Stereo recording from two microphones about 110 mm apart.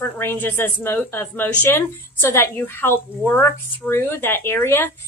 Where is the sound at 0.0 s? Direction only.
20° left (ahead or behind).